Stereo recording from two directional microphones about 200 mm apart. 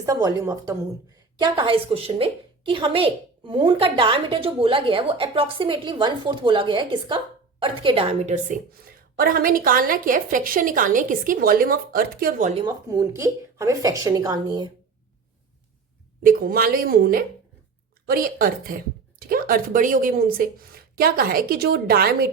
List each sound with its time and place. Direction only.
0.0 s a woman's voice: 15° right (ahead or behind); by 12.5 s 45° right (ahead or behind)
12.9 s a woman's voice: 15° right (ahead or behind)
16.2 s a woman's voice: 45° right (ahead or behind)